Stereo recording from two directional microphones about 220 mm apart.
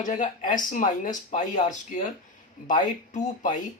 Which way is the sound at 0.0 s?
35° left (ahead or behind).